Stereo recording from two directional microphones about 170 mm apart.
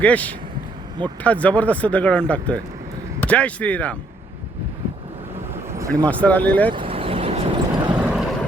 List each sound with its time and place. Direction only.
0.0 s speech: 10° left (ahead or behind)
5.7 s a sound: 20° right (ahead or behind)
6.1 s speech: 10° left (ahead or behind)
6.7 s vehicle: 30° right (ahead or behind)
7.9 s vehicle: 5° right (ahead or behind)